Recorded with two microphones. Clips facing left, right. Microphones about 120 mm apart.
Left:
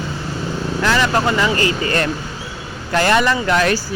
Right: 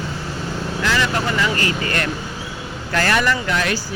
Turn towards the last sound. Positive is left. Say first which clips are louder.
# left 5 dB
turn(degrees=45)  # may be behind; listen again after turning